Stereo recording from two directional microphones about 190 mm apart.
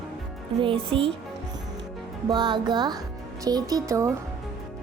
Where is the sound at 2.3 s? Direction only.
25° right (ahead or behind).